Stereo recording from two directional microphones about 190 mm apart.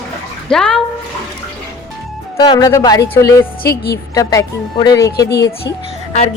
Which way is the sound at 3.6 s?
55° left (ahead or behind).